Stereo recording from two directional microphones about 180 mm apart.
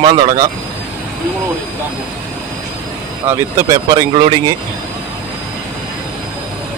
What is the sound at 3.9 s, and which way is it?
Speech, 25° right (ahead or behind).